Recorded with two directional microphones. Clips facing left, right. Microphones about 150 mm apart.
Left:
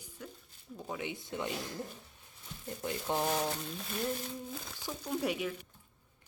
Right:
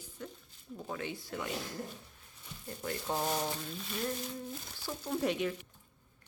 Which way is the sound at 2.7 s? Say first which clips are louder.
Left 1 dB; 15° left (ahead or behind).